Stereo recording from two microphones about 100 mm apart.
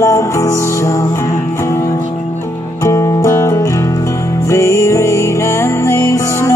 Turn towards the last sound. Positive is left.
turn(degrees=30)  # may be behind; listen again after turning